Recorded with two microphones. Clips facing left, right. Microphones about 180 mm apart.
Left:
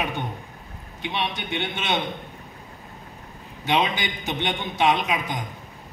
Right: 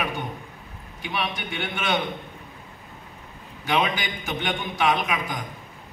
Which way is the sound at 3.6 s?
25° left (ahead or behind).